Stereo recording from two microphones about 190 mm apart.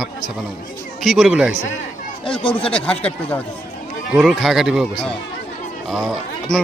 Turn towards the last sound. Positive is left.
turn(degrees=0)  # may be behind; listen again after turning